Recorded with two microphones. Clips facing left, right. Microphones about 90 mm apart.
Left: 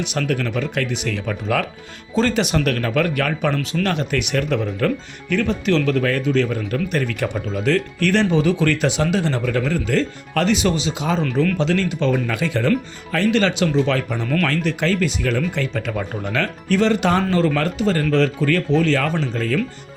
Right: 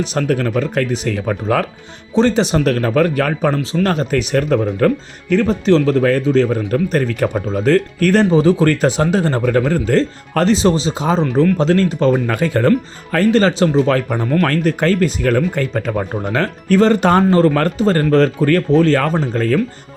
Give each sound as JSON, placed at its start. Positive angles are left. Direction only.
{"t": 0.0, "sound": "speech", "side_deg": -35}
{"t": 2.1, "sound": "speech", "side_deg": -25}